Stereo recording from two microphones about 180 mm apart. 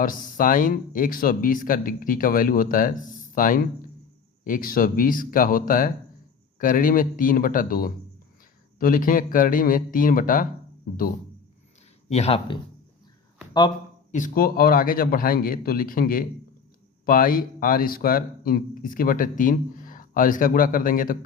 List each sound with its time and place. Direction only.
0.0 s speech: 50° left (ahead or behind)
12.0 s speech: 35° left (ahead or behind)
14.1 s speech: 50° left (ahead or behind)